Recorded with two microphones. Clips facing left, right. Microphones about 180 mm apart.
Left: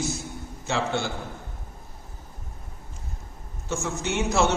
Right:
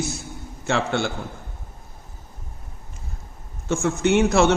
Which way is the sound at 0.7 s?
65° right (ahead or behind).